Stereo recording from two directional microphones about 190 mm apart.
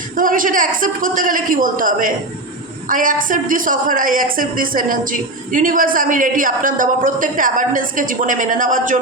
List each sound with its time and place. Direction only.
0.2 s a man's voice: 45° right (ahead or behind)